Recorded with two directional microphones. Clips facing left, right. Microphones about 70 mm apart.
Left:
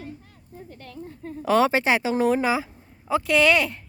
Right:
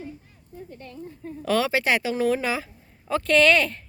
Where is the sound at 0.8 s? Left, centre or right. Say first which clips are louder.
Left 3 dB; left.